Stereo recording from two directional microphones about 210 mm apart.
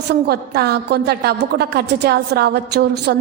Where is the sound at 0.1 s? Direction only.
50° right (ahead or behind).